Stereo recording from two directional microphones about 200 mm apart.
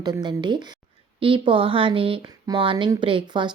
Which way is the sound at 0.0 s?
20° right (ahead or behind).